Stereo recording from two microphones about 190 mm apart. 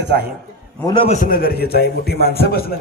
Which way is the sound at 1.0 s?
45° left (ahead or behind).